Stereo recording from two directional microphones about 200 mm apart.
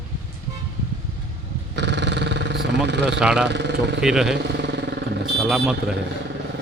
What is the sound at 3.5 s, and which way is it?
Speech, 60° right (ahead or behind).